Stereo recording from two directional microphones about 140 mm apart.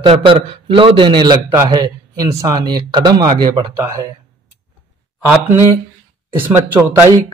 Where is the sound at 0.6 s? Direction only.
40° right (ahead or behind).